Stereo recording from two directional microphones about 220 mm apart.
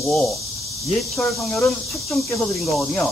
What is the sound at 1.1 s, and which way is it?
Speech, 5° left (ahead or behind).